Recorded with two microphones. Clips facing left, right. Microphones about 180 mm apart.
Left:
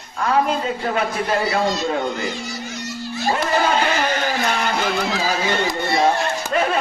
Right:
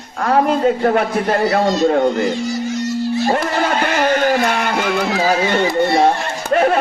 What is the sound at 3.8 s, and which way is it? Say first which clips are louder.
Speech: right 5 dB; 50° right (ahead or behind).